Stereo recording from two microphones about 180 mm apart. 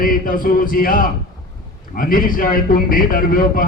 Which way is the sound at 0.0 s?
50° left (ahead or behind).